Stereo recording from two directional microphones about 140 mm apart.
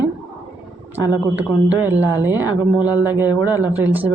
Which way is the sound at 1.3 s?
10° right (ahead or behind).